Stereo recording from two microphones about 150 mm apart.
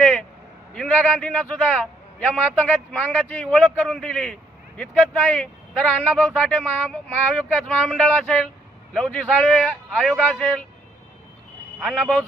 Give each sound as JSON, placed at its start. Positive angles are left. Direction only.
{"t": 0.0, "sound": "a sound", "side_deg": 10}
{"t": 0.7, "sound": "speech", "side_deg": 10}
{"t": 3.5, "sound": "a man's voice", "side_deg": 0}
{"t": 11.8, "sound": "a man's voice", "side_deg": 5}